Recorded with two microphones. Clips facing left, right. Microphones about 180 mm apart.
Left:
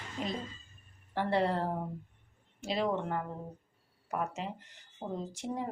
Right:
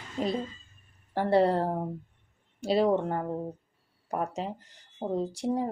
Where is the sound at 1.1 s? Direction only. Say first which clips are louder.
Right 6 dB; 35° right (ahead or behind).